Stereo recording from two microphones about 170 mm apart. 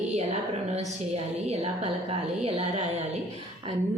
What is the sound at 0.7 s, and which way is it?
A woman's voice, 40° right (ahead or behind).